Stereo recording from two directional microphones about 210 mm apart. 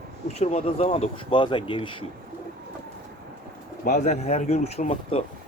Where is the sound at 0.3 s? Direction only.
30° left (ahead or behind).